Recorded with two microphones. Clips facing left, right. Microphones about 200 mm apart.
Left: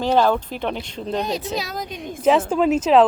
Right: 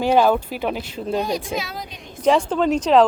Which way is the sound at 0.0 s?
10° right (ahead or behind).